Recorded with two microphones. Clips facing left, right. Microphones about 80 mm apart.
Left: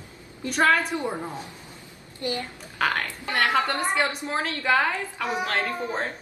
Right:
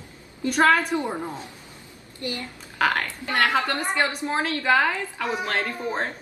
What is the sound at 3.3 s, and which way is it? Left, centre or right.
Speech, right.